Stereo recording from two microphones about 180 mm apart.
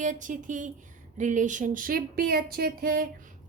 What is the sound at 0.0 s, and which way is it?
A woman's voice, 45° right (ahead or behind).